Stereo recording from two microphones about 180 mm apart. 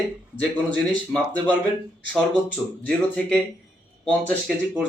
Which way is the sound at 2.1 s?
5° left (ahead or behind).